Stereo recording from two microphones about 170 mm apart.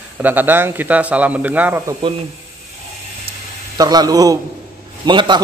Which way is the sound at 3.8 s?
25° right (ahead or behind).